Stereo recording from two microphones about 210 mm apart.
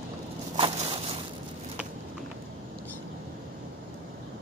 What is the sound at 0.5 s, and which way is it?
Crushing, 25° right (ahead or behind).